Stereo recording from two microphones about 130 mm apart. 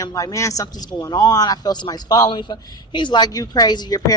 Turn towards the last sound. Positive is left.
turn(degrees=30)  # may be behind; listen again after turning